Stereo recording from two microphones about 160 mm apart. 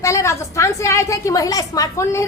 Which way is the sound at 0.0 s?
20° left (ahead or behind).